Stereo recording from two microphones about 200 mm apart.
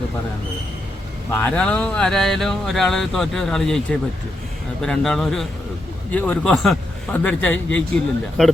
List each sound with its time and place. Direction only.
1.3 s a man's voice: 10° left (ahead or behind)